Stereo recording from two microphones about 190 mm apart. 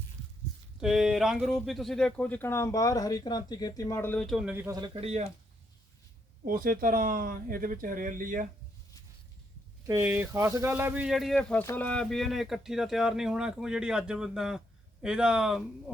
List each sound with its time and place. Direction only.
0.8 s speech: 5° right (ahead or behind)
4.8 s speech: 30° right (ahead or behind)
6.4 s speech: 45° right (ahead or behind)
9.8 s speech: 15° right (ahead or behind)